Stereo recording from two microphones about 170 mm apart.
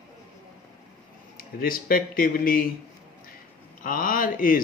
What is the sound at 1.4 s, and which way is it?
A man's voice, 55° left (ahead or behind).